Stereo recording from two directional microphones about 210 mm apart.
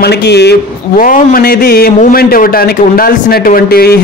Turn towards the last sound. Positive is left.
turn(degrees=45)  # may be behind; listen again after turning